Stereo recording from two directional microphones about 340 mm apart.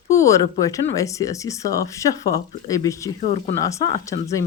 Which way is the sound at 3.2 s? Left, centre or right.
Centre.